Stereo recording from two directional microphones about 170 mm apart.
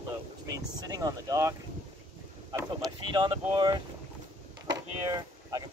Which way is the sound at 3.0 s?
30° right (ahead or behind).